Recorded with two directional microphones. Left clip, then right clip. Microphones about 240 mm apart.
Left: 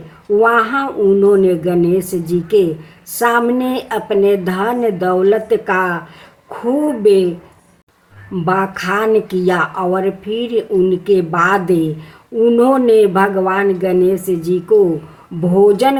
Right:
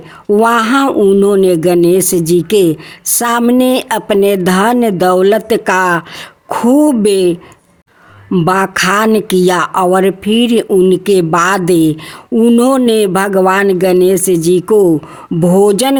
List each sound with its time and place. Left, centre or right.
0.3 s speech: right
8.3 s speech: right